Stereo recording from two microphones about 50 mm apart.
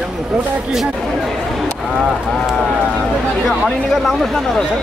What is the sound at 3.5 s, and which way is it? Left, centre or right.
Speech, centre.